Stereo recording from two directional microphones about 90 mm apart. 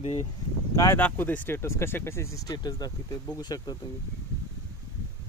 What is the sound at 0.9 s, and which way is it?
Speech, 20° left (ahead or behind).